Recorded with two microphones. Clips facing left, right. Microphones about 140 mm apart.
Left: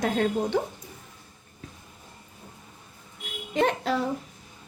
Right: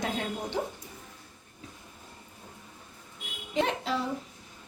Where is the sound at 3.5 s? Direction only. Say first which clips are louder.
Left 4 dB; 50° left (ahead or behind).